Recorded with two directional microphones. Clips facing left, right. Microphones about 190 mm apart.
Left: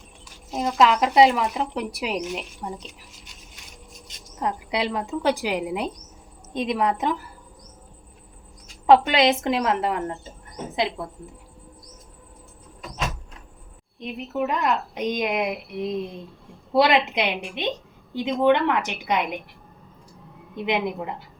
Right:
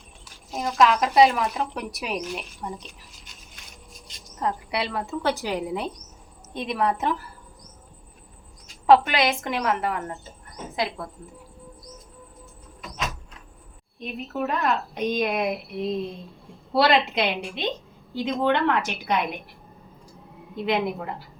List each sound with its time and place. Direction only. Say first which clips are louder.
0.5 s speech: left 1 dB; 20° left (ahead or behind)
4.4 s a woman's voice: left 1 dB; 15° left (ahead or behind)
8.9 s speech: left 2 dB; 25° left (ahead or behind)
14.0 s a woman's voice: left 2 dB; 15° left (ahead or behind)
20.7 s a woman's voice: even; 20° left (ahead or behind)